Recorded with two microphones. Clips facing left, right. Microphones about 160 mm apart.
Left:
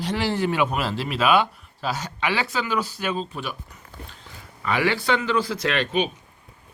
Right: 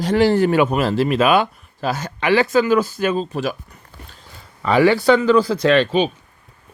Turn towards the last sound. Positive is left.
turn(degrees=-30)  # may be behind; listen again after turning